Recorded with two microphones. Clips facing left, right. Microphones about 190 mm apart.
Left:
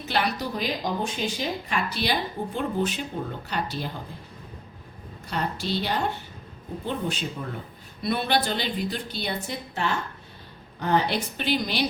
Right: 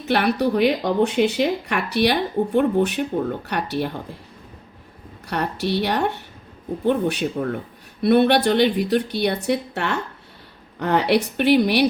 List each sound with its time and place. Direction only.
0.0 s speech: 60° right (ahead or behind)
5.3 s speech: 65° right (ahead or behind)